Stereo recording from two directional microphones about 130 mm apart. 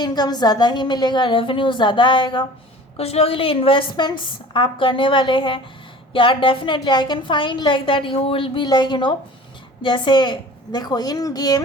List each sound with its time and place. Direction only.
0.0 s a woman's voice: 30° left (ahead or behind)
3.0 s a woman's voice: 50° left (ahead or behind); by 11.6 s 30° left (ahead or behind)